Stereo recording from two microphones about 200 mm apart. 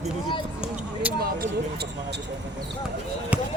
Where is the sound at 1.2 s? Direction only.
55° right (ahead or behind).